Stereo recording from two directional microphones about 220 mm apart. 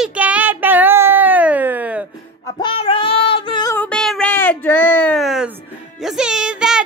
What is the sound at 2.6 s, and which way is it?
Child singing, 25° left (ahead or behind).